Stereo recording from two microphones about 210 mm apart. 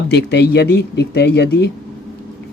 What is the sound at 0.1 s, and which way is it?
Speech, 55° left (ahead or behind).